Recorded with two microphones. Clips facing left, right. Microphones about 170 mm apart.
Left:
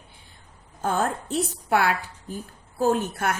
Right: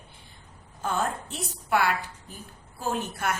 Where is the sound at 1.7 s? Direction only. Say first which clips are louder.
Left 2 dB; 55° left (ahead or behind).